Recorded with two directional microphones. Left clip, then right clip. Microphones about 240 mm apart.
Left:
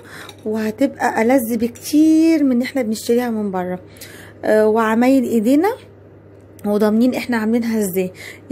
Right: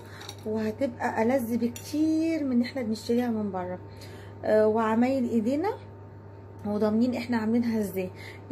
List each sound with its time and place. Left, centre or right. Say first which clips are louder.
0.5 s speech: left 10 dB; left